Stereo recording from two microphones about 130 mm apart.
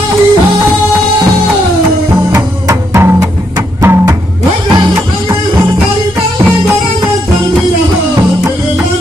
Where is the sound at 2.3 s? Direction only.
20° right (ahead or behind).